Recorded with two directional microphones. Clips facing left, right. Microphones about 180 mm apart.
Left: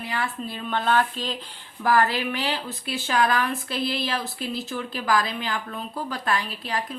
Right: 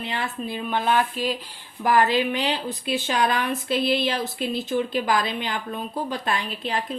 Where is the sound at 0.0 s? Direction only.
25° right (ahead or behind).